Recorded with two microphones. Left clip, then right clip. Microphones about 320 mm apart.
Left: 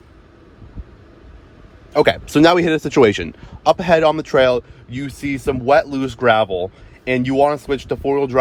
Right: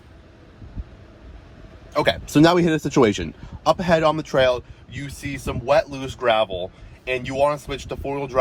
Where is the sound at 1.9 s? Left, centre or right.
Left.